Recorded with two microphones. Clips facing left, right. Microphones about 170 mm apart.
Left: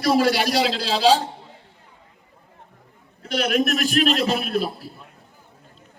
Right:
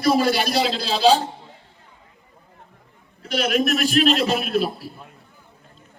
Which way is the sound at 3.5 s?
50° left (ahead or behind).